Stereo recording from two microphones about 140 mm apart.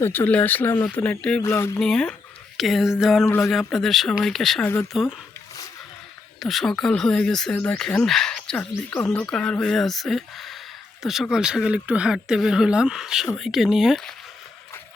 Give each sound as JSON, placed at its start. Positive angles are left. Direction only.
{"t": 0.0, "sound": "speech", "side_deg": 15}
{"t": 1.4, "sound": "speech", "side_deg": 20}
{"t": 1.8, "sound": "speech", "side_deg": 5}
{"t": 3.2, "sound": "speech", "side_deg": 20}
{"t": 3.5, "sound": "speech", "side_deg": 0}
{"t": 4.6, "sound": "speech", "side_deg": 15}
{"t": 4.9, "sound": "speech", "side_deg": 0}
{"t": 6.4, "sound": "speech", "side_deg": 0}